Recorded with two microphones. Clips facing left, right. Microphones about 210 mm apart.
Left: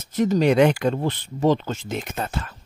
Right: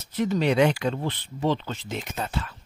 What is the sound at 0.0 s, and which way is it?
Speech, 45° left (ahead or behind).